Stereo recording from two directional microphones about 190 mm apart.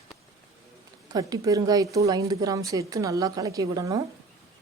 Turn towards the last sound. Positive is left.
turn(degrees=-15)  # may be behind; listen again after turning